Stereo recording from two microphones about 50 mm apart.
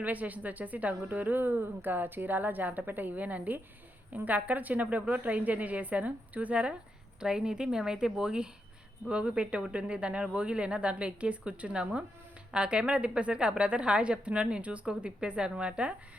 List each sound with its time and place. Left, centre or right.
0.0 s a woman's voice: right
7.2 s a woman's voice: centre